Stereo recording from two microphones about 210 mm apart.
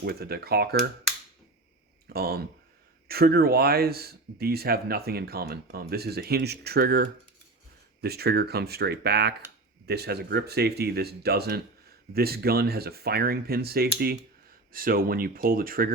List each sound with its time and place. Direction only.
0.0 s speech: 50° right (ahead or behind)
2.1 s speech: 45° right (ahead or behind)